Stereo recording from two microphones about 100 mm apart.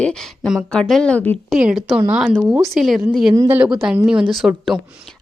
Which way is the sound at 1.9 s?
15° right (ahead or behind).